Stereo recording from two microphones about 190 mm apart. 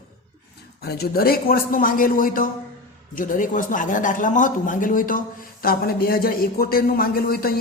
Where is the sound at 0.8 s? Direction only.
55° left (ahead or behind).